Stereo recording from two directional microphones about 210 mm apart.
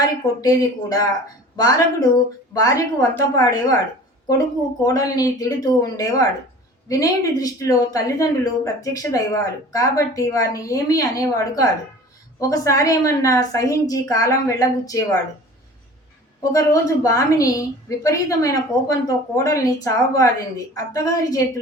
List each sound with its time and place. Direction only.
0.0 s speech: 15° left (ahead or behind)
4.8 s speech: 15° left (ahead or behind)
16.4 s speech: 15° left (ahead or behind)